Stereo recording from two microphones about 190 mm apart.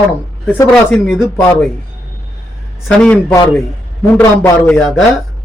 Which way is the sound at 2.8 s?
5° left (ahead or behind).